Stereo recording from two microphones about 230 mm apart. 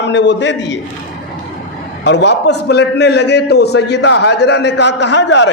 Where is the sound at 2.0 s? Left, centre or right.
Left.